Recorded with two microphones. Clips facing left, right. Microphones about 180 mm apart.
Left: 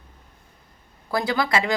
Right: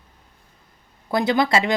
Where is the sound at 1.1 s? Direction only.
20° right (ahead or behind).